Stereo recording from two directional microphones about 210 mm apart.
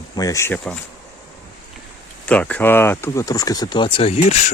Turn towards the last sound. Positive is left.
turn(degrees=30)  # may be behind; listen again after turning